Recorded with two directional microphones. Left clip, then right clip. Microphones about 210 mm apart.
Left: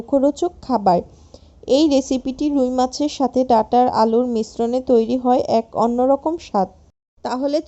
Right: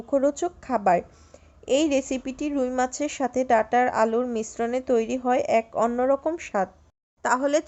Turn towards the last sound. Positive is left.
turn(degrees=-5)  # may be behind; listen again after turning